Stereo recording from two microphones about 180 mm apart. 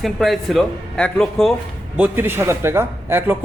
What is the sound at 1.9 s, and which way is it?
Speech, 10° right (ahead or behind).